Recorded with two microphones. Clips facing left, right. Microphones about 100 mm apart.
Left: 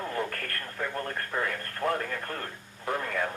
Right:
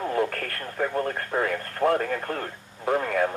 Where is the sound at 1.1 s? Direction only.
30° right (ahead or behind).